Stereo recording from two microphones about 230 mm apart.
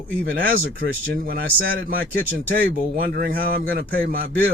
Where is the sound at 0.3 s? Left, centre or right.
Right.